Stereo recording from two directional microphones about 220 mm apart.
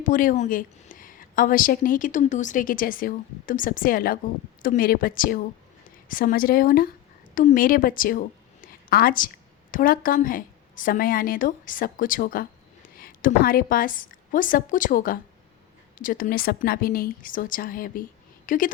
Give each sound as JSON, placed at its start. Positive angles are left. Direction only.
{"t": 0.0, "sound": "a woman's voice", "side_deg": 40}
{"t": 8.6, "sound": "a sound", "side_deg": 40}
{"t": 9.7, "sound": "a woman's voice", "side_deg": 40}